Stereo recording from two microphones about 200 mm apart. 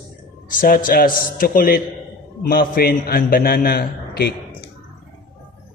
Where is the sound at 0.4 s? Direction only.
45° left (ahead or behind).